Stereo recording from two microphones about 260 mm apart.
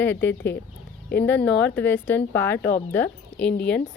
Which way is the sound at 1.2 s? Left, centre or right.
Centre.